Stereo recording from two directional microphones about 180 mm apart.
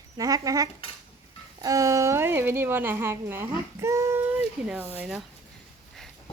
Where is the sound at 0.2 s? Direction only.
20° right (ahead or behind).